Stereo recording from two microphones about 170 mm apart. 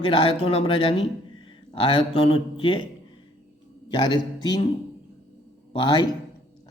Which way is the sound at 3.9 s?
25° left (ahead or behind).